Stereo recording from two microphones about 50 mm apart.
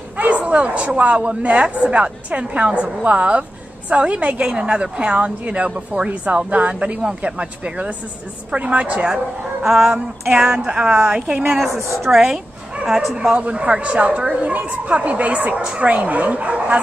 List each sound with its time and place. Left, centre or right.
0.2 s a woman's voice: right
9.1 s speech: centre
11.5 s a woman's voice: centre
13.3 s a woman's voice: right